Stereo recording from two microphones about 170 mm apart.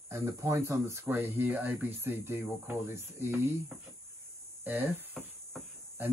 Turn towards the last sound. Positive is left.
turn(degrees=-10)  # may be behind; listen again after turning